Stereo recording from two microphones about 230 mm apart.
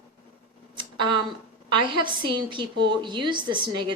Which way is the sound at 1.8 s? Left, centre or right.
Centre.